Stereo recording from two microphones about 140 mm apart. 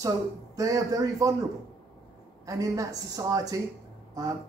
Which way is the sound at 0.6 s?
25° right (ahead or behind).